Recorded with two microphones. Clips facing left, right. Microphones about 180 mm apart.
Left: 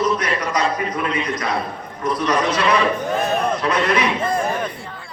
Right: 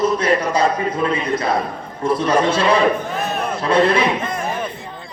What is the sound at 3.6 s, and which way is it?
Speech, 30° right (ahead or behind).